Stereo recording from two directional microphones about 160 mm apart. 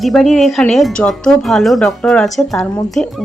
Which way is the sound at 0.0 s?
Centre (ahead or behind).